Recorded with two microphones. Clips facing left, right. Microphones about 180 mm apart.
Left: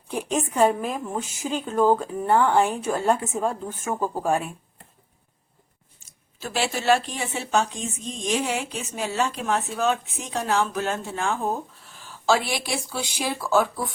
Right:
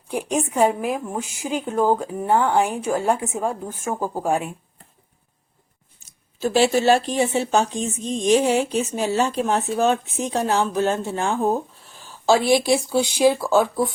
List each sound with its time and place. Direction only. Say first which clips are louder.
0.1 s a woman's voice: right 3 dB; 10° right (ahead or behind)
6.4 s speech: right 8 dB; 30° right (ahead or behind)